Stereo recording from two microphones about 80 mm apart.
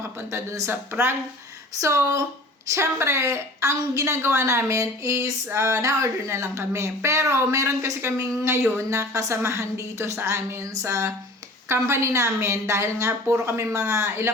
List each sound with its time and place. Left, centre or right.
0.3 s a woman's voice: right
1.8 s a woman's voice: right